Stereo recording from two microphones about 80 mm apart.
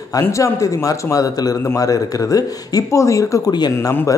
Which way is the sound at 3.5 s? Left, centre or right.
Left.